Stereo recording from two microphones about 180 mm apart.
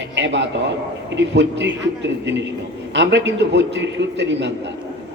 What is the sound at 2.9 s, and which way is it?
A man's voice, 75° right (ahead or behind).